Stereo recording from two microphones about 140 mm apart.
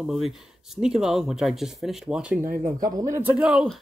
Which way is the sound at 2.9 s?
25° right (ahead or behind).